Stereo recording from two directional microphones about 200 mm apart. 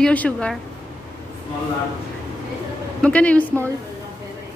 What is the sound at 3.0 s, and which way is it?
Speech, 5° left (ahead or behind).